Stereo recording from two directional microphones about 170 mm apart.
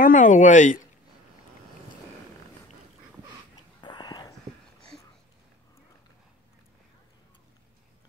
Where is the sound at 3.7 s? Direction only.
25° left (ahead or behind).